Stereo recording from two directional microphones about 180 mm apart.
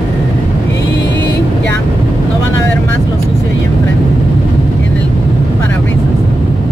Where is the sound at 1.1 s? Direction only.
80° left.